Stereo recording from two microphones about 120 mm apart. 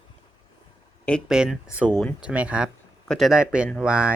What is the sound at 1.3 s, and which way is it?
Speech, 5° right (ahead or behind).